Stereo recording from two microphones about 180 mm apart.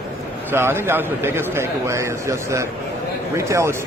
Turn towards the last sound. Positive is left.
turn(degrees=-15)  # may be behind; listen again after turning